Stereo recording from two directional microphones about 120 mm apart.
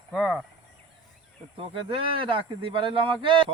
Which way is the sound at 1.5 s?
50° right (ahead or behind).